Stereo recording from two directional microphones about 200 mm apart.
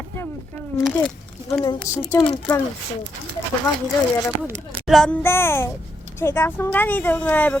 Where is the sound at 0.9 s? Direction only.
Centre (ahead or behind).